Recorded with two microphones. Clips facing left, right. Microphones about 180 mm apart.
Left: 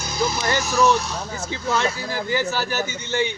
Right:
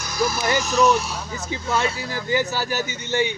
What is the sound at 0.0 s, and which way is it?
Music, 25° left (ahead or behind).